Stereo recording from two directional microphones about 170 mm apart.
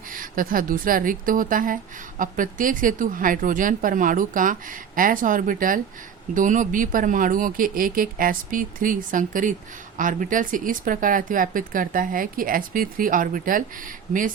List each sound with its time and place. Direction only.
0.1 s a woman's voice: 55° right (ahead or behind)